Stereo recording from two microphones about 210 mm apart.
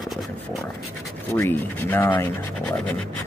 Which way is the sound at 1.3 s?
10° left (ahead or behind).